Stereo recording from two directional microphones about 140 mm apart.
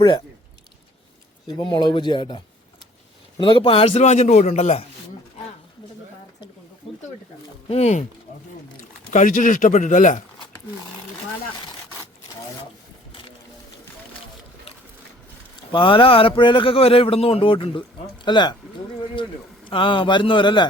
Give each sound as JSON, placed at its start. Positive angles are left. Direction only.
{"t": 1.5, "sound": "a man's voice", "side_deg": 35}
{"t": 7.7, "sound": "a man's voice", "side_deg": 50}
{"t": 8.8, "sound": "speech", "side_deg": 65}
{"t": 15.7, "sound": "speech", "side_deg": 35}
{"t": 19.7, "sound": "speech", "side_deg": 35}